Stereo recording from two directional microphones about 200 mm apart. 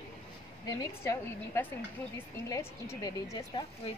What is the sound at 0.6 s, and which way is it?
A woman's voice, 15° left (ahead or behind).